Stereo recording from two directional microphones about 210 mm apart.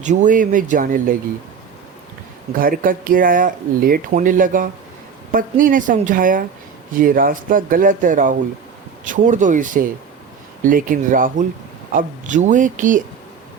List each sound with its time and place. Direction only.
0.0 s speech: 35° right (ahead or behind)
2.5 s speech: 40° right (ahead or behind)